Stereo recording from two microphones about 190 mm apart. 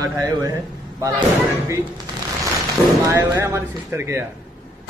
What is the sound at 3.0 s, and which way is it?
Speech, 15° right (ahead or behind).